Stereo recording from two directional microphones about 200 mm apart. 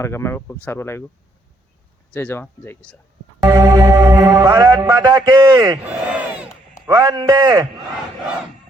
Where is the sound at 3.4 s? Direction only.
15° right (ahead or behind).